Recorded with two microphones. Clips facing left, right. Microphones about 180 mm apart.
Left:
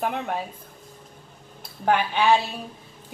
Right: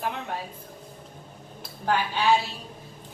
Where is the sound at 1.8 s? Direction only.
60° left (ahead or behind).